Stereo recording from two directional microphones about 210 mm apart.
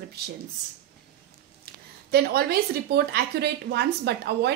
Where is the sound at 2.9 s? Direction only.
50° right (ahead or behind).